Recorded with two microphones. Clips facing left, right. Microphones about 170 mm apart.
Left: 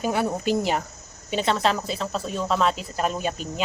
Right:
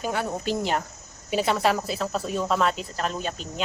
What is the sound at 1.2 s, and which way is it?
A woman's voice, 5° right (ahead or behind).